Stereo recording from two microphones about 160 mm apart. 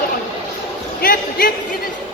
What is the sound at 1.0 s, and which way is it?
Speech, 65° left (ahead or behind).